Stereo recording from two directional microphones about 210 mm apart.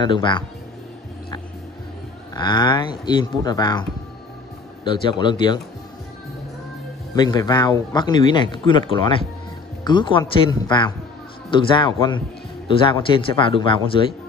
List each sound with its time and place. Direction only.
0.0 s a man's voice: 20° left (ahead or behind)
2.3 s a man's voice: 20° left (ahead or behind)
4.8 s a man's voice: 20° left (ahead or behind)
7.2 s a man's voice: 20° left (ahead or behind)